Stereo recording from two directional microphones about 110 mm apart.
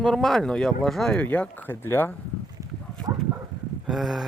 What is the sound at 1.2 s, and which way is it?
Speech, 15° left (ahead or behind).